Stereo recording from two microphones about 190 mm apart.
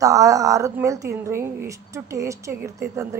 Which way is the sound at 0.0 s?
15° right (ahead or behind).